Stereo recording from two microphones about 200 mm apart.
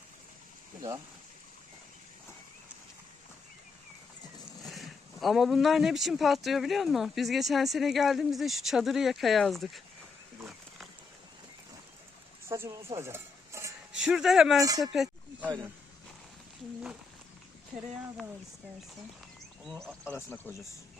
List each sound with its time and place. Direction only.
0.8 s speech: 15° right (ahead or behind)
4.6 s speech: centre (ahead or behind)
12.5 s a sound: 15° right (ahead or behind)
14.0 s speech: 5° right (ahead or behind)
20.1 s speech: 10° left (ahead or behind)